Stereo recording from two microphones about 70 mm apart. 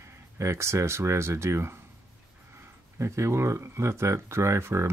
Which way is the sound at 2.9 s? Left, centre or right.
Right.